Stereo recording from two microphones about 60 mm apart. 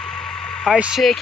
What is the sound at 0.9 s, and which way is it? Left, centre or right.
Speech, centre.